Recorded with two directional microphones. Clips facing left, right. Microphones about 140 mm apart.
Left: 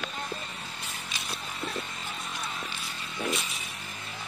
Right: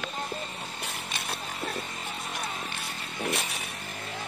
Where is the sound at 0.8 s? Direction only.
60° right (ahead or behind).